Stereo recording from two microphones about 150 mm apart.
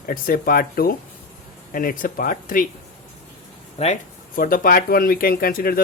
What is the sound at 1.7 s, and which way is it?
Speech, 70° left (ahead or behind).